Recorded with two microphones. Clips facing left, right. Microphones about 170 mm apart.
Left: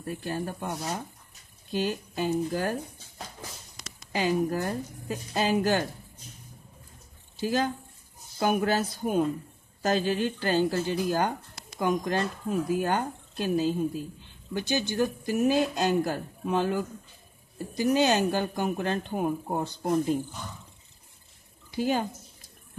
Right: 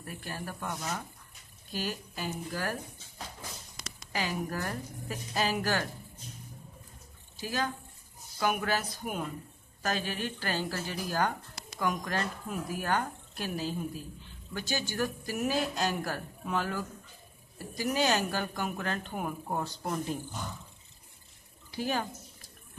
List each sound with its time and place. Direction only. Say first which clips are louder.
0.0 s speech: left 8 dB; 25° left (ahead or behind)
1.7 s speech: left 7 dB; 20° left (ahead or behind)
4.1 s speech: left 8 dB; 25° left (ahead or behind)
7.3 s speech: left 7 dB; 25° left (ahead or behind)
21.6 s speech: left 5 dB; 20° left (ahead or behind)